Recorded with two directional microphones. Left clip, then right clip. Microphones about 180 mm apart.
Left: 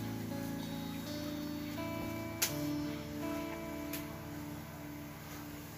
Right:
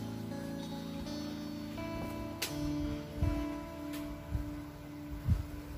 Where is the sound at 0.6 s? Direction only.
Centre (ahead or behind).